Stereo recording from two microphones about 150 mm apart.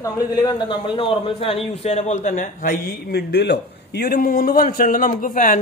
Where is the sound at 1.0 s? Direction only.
35° left (ahead or behind).